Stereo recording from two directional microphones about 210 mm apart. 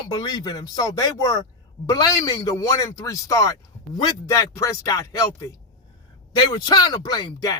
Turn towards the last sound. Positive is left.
turn(degrees=20)  # may be behind; listen again after turning